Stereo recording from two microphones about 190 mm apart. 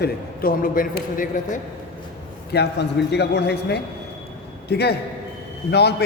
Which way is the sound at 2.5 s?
60° left (ahead or behind).